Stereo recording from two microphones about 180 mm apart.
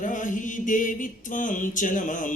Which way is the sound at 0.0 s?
45° left (ahead or behind).